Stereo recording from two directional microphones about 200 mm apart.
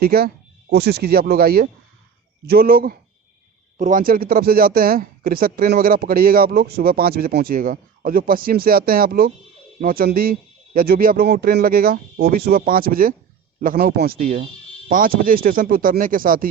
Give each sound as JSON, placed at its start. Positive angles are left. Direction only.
{"t": 0.0, "sound": "speech", "side_deg": -50}